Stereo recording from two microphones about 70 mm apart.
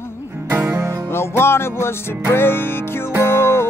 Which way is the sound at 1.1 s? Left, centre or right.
Left.